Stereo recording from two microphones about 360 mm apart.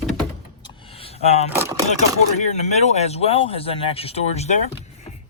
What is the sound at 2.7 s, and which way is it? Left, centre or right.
Speech, centre.